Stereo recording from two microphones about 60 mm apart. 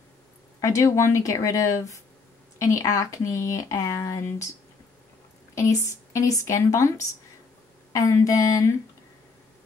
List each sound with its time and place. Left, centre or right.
0.6 s speech: left
4.2 s speech: left
5.5 s speech: left